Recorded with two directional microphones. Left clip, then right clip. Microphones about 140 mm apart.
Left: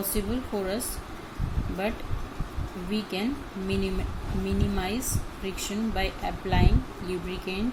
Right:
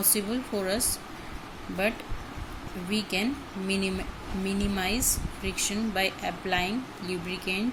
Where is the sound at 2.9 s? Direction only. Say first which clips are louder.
Right 2 dB; 15° right (ahead or behind).